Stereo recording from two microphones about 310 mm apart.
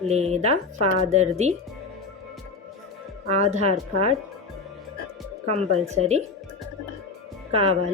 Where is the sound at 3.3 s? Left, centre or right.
Right.